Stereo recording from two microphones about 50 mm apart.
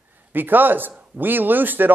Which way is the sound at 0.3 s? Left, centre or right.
Right.